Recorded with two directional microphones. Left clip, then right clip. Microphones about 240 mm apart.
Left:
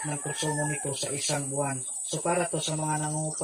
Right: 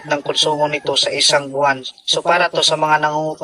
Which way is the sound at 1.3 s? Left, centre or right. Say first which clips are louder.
Right 16 dB; right.